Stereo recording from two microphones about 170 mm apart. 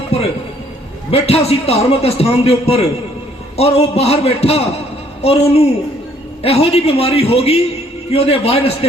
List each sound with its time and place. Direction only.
1.1 s a man's voice: 35° left (ahead or behind)